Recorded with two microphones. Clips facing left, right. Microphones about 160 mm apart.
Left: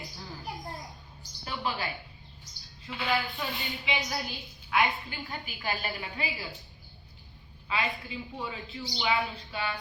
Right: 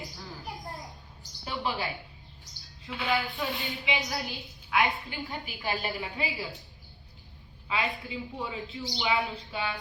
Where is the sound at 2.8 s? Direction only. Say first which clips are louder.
Right 1 dB; centre (ahead or behind).